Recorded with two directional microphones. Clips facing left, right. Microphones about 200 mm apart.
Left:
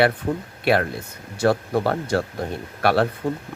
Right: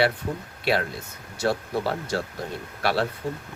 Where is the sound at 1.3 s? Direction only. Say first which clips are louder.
Left 5 dB; 55° left (ahead or behind).